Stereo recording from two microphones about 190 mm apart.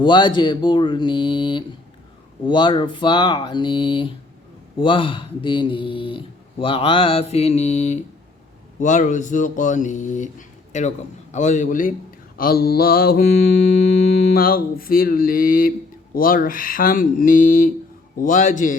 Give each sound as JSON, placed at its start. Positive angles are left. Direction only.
{"t": 0.0, "sound": "speech", "side_deg": 25}
{"t": 12.4, "sound": "mantra", "side_deg": 50}